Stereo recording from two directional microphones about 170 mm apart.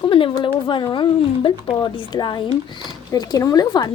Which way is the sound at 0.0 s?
30° left (ahead or behind).